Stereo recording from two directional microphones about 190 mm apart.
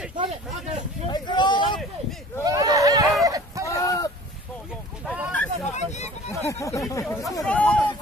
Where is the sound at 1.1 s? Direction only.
25° left (ahead or behind).